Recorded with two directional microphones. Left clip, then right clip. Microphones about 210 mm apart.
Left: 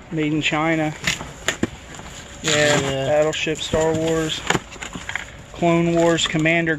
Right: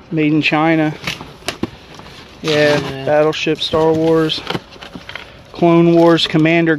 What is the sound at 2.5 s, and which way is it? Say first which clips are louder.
Speech: right 4 dB; 45° right (ahead or behind).